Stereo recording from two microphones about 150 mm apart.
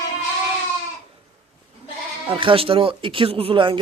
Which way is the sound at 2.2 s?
35° right (ahead or behind).